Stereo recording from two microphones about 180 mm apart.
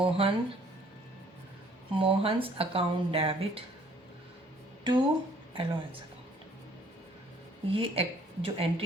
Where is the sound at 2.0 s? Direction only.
30° right (ahead or behind).